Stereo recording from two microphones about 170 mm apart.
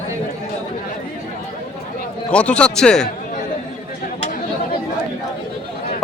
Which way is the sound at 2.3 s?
5° left (ahead or behind).